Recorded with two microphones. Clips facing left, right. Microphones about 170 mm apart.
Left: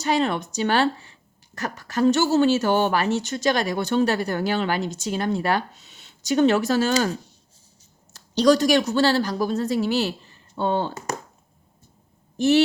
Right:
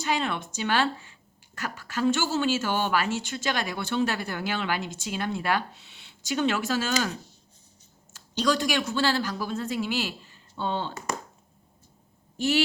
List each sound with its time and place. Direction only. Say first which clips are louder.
0.0 s speech: left 6 dB; 40° left (ahead or behind)
8.4 s speech: left 8 dB; 40° left (ahead or behind)